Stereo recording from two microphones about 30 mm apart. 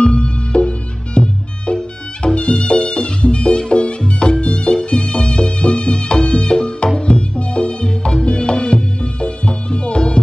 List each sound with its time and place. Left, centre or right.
0.0 s music: left